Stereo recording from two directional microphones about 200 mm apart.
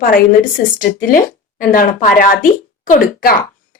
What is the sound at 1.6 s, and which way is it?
A woman's voice, 45° left (ahead or behind).